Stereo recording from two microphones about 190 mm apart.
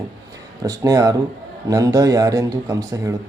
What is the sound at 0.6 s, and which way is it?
Speech, 15° right (ahead or behind).